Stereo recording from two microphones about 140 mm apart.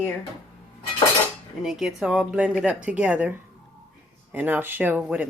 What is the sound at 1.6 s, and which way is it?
Speech, 5° right (ahead or behind).